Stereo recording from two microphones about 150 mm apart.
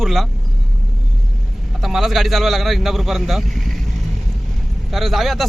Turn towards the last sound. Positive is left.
turn(degrees=0)  # may be behind; listen again after turning